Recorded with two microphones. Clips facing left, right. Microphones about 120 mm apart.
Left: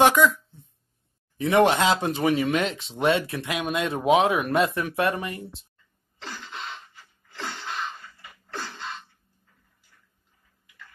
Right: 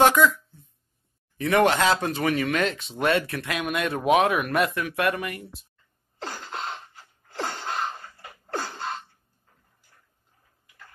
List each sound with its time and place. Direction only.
0.0 s speech: 15° left (ahead or behind)
1.4 s speech: 25° left (ahead or behind)
6.2 s sneeze: 50° right (ahead or behind)